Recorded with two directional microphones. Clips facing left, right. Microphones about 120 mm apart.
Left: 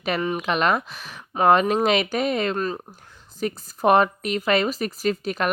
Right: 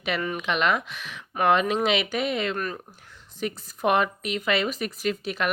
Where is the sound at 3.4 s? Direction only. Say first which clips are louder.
Left 4 dB; 40° left (ahead or behind).